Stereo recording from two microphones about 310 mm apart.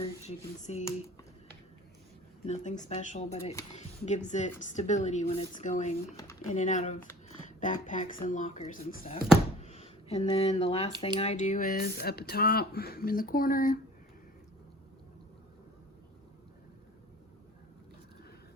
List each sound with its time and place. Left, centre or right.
0.0 s speech: left
2.5 s speech: left
9.6 s a sound: centre
11.2 s speech: left